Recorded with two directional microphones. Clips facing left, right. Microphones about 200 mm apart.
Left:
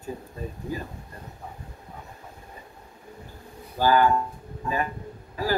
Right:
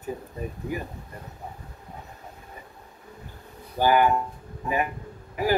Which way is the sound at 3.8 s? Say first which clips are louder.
Even; 20° right (ahead or behind).